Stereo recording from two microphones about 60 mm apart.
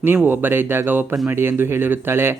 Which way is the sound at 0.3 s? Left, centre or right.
Right.